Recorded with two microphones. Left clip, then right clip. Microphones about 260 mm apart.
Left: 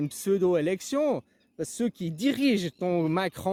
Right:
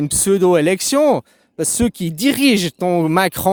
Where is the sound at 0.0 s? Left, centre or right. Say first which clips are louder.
Right 10 dB; right.